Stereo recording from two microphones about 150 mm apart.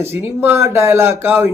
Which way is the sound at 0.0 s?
20° right (ahead or behind).